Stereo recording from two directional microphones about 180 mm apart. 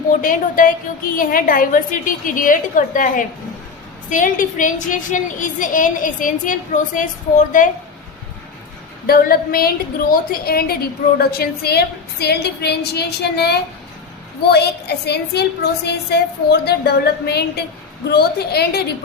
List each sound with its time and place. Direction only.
0.2 s a woman's voice: 50° left (ahead or behind)
9.0 s a woman's voice: 55° left (ahead or behind)